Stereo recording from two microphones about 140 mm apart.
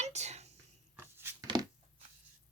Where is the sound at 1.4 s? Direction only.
30° right (ahead or behind).